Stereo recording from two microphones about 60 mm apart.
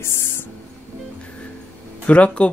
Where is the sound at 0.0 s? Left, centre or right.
Left.